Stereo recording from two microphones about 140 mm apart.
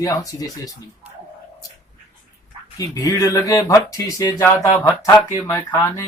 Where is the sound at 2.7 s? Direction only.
25° left (ahead or behind).